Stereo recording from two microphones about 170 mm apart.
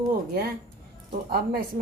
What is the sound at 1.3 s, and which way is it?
Speech, 65° right (ahead or behind).